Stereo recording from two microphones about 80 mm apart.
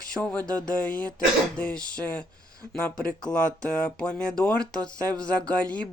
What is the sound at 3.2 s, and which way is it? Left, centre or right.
Speech, centre.